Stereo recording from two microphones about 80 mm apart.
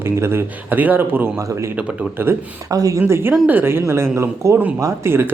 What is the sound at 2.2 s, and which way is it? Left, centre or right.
Speech, right.